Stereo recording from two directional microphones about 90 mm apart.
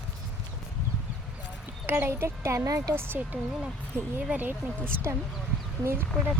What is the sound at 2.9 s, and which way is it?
Speech, 25° right (ahead or behind).